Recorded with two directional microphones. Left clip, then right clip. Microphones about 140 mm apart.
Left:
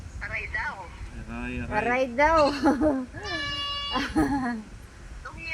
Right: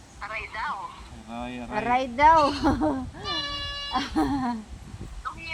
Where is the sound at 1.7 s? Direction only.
15° right (ahead or behind).